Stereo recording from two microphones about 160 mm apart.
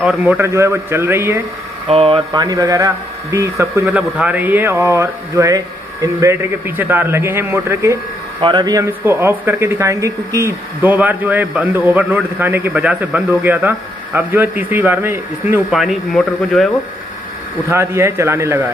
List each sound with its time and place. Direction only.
0.0 s speech: 5° right (ahead or behind)
1.9 s speech: 35° right (ahead or behind); by 8.0 s 15° right (ahead or behind)
8.4 s speech: 30° right (ahead or behind); by 16.7 s centre (ahead or behind)
17.6 s speech: 15° right (ahead or behind)